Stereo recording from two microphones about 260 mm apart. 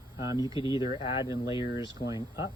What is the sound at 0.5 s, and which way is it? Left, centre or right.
Speech, centre.